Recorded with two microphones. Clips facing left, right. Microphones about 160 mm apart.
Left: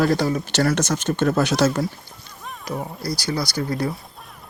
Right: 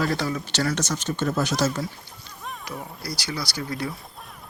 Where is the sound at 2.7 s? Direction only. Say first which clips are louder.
Left 9 dB; 40° left (ahead or behind).